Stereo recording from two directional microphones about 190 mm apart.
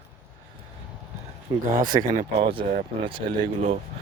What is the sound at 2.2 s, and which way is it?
A man's voice, 30° right (ahead or behind).